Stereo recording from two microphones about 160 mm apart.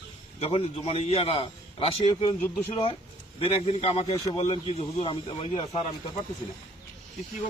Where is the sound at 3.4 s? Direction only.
40° left (ahead or behind).